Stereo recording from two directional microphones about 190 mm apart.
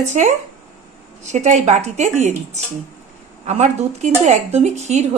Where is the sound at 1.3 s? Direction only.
40° right (ahead or behind).